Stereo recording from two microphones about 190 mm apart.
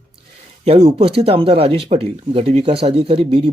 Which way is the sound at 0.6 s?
30° right (ahead or behind).